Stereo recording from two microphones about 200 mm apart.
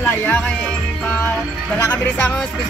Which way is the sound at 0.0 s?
10° left (ahead or behind).